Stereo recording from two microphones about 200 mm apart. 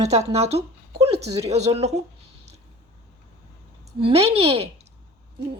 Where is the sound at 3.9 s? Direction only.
30° right (ahead or behind).